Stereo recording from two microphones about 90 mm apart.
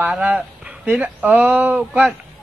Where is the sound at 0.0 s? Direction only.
15° right (ahead or behind).